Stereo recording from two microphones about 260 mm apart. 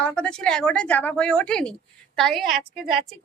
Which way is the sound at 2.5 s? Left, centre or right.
Right.